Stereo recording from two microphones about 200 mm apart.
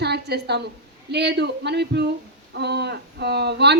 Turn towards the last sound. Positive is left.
turn(degrees=-55)  # may be behind; listen again after turning